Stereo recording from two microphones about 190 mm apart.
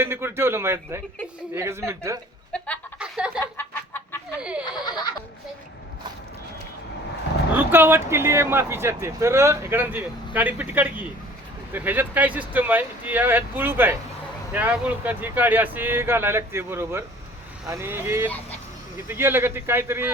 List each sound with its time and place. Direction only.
0.0 s speech: 10° right (ahead or behind)
2.5 s chicken: 5° left (ahead or behind)
3.0 s a sound: 5° right (ahead or behind)
3.4 s chicken: 10° left (ahead or behind)
4.4 s speech: 5° right (ahead or behind)
7.5 s speech: 10° right (ahead or behind)